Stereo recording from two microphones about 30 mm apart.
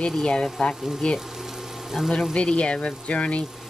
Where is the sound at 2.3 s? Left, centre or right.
Left.